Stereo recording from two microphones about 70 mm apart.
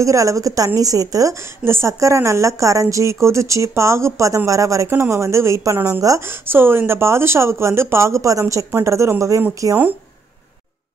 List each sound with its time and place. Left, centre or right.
0.0 s a woman's voice: right
1.6 s a woman's voice: right
6.2 s a woman's voice: right